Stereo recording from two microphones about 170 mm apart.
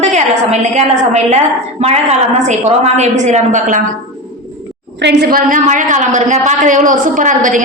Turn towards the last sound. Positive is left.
turn(degrees=-50)  # may be behind; listen again after turning